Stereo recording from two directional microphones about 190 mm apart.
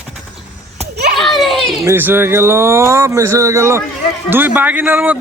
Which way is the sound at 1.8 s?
10° right (ahead or behind).